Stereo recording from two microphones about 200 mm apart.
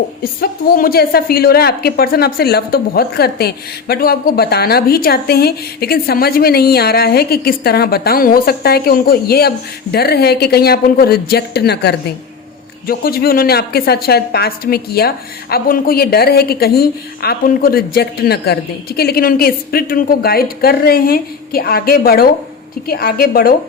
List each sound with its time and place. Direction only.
0.4 s a woman's voice: 50° left (ahead or behind)